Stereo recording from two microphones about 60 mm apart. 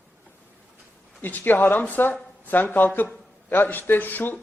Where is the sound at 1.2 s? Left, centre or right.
Left.